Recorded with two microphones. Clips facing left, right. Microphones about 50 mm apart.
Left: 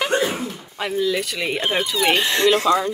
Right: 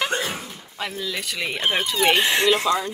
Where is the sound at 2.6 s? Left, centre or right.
Centre.